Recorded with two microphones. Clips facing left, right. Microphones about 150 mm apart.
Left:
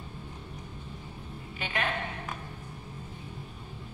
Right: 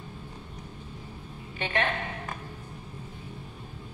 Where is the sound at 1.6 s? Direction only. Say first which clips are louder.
Right 3 dB; 35° right (ahead or behind).